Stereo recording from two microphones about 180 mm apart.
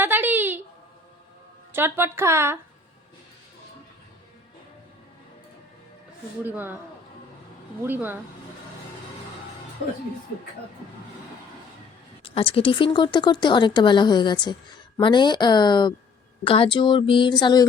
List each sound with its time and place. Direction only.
0.0 s a sound: 10° right (ahead or behind)
1.7 s a woman's voice: 15° right (ahead or behind)
6.4 s a woman's voice: 10° right (ahead or behind)
7.9 s a woman's voice: 10° right (ahead or behind)
12.2 s a woman's voice: 30° left (ahead or behind)